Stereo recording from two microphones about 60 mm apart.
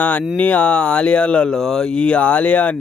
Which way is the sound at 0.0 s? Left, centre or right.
Left.